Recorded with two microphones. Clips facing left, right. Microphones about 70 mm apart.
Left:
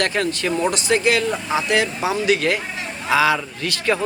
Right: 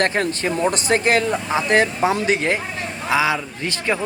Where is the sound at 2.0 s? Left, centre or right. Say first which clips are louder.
Even; right.